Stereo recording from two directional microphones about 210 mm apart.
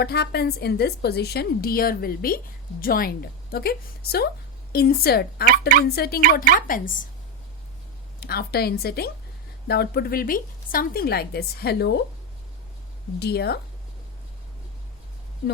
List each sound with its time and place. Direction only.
0.0 s a woman's voice: 50° left (ahead or behind)
8.2 s a woman's voice: 50° left (ahead or behind)
13.1 s a woman's voice: 50° left (ahead or behind)